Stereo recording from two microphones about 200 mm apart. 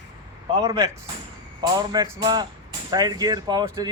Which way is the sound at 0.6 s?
20° right (ahead or behind).